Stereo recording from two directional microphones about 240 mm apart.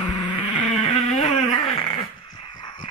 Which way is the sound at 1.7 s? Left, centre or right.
Left.